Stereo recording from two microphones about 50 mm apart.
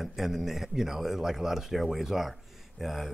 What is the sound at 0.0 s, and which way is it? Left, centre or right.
Speech, centre.